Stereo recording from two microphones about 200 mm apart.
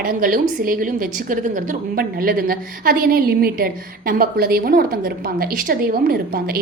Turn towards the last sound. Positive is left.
turn(degrees=-45)  # may be behind; listen again after turning